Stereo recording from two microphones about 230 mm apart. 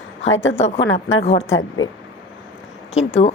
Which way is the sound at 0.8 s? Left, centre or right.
Left.